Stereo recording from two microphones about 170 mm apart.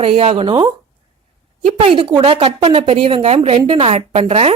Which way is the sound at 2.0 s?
30° right (ahead or behind).